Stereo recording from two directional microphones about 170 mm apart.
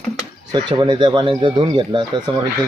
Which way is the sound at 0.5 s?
25° right (ahead or behind).